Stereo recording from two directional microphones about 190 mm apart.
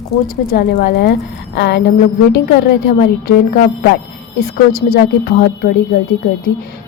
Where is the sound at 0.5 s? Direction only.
60° left (ahead or behind).